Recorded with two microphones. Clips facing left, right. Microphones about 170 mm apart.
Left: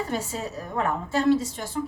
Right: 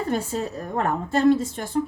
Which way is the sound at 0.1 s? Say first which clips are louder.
Right 4 dB; 55° right (ahead or behind).